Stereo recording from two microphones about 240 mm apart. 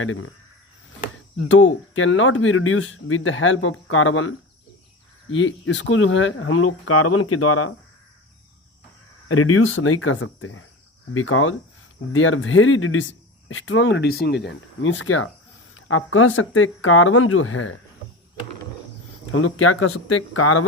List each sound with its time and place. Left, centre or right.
0.0 s speech: left
1.5 s speech: left
9.3 s speech: left
19.3 s speech: left